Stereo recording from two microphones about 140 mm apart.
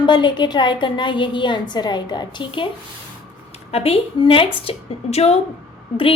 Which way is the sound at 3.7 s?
45° left (ahead or behind).